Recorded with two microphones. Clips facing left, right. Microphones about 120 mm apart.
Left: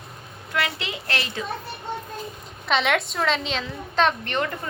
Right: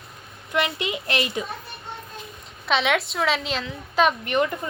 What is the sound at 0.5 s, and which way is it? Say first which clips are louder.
Speech: right 3 dB; 20° right (ahead or behind).